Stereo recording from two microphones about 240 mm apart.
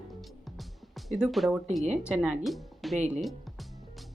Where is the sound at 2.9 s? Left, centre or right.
Right.